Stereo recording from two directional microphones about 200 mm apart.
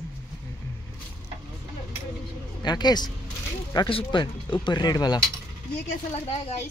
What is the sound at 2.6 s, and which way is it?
Speech, 20° left (ahead or behind).